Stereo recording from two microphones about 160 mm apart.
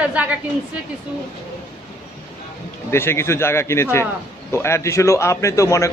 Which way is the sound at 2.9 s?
15° left (ahead or behind).